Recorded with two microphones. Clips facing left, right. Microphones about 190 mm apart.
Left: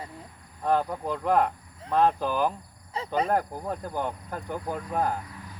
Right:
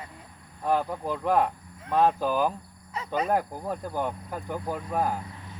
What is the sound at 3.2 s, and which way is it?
Cricket, 5° right (ahead or behind).